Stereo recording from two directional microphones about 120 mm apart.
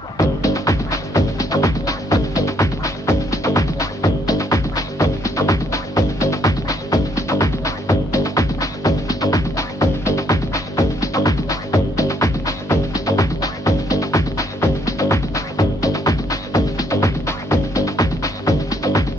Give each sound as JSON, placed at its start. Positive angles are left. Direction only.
{"t": 0.2, "sound": "music", "side_deg": 30}